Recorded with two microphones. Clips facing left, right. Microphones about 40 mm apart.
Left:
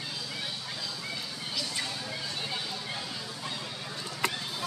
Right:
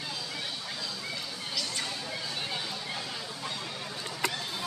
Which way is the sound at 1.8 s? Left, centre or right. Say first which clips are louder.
Even; centre.